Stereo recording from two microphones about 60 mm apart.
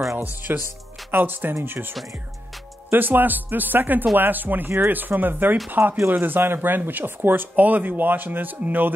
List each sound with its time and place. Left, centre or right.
0.2 s speech: right